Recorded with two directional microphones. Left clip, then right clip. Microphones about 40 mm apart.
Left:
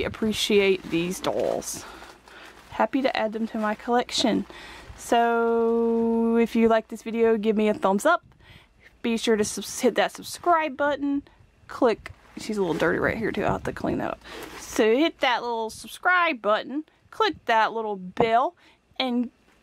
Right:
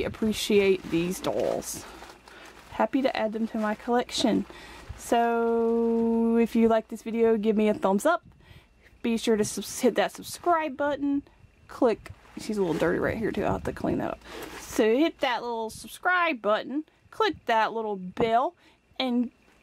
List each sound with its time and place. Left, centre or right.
0.3 s speech: left
1.3 s speech: centre
1.6 s speech: left
3.5 s speech: centre
3.9 s speech: left
4.9 s a sound: left
5.2 s speech: centre
5.7 s music: centre
6.3 s speech: left
12.8 s speech: centre
13.1 s speech: left
14.6 s speech: left